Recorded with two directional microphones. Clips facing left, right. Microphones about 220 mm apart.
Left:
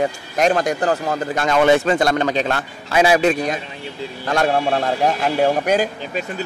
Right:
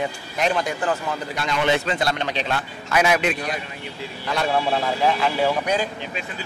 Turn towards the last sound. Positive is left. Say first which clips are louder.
# left 5 dB
turn(degrees=45)  # may be behind; listen again after turning